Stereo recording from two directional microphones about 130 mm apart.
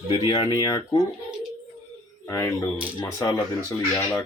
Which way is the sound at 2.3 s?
25° left (ahead or behind).